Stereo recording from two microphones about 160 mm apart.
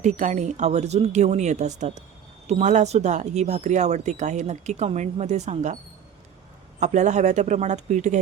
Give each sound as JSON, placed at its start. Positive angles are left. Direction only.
{"t": 0.0, "sound": "speech", "side_deg": -50}
{"t": 6.7, "sound": "speech", "side_deg": -45}